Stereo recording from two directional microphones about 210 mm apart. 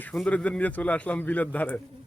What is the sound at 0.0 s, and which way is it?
Speech, 5° left (ahead or behind).